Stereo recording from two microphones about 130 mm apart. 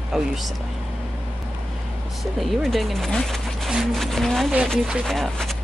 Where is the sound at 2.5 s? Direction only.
Centre (ahead or behind).